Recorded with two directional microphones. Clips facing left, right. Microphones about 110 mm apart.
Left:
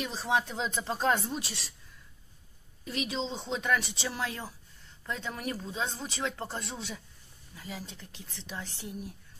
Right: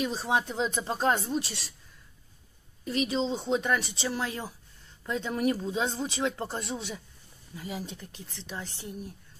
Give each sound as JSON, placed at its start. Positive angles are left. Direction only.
{"t": 0.0, "sound": "speech", "side_deg": -5}
{"t": 2.8, "sound": "speech", "side_deg": 0}
{"t": 8.1, "sound": "speech", "side_deg": 0}